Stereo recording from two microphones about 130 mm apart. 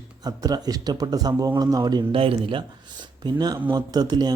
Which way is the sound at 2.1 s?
45° right (ahead or behind).